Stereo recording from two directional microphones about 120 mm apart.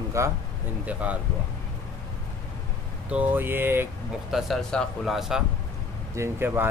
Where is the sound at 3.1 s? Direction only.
15° right (ahead or behind).